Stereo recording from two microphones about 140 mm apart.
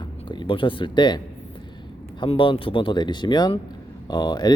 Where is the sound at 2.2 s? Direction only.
35° left (ahead or behind).